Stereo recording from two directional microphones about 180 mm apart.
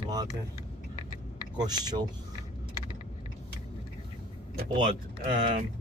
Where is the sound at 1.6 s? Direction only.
20° right (ahead or behind).